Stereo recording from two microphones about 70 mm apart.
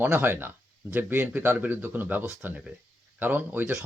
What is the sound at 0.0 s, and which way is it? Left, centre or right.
Speech, right.